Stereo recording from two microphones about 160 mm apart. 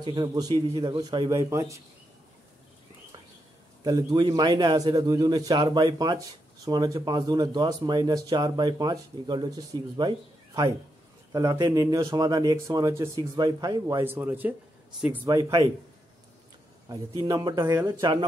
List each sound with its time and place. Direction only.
0.0 s a man's voice: 30° right (ahead or behind)
3.8 s a man's voice: 25° right (ahead or behind)
17.2 s a man's voice: 25° right (ahead or behind)